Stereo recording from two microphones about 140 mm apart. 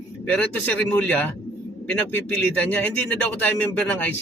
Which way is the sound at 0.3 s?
10° left (ahead or behind).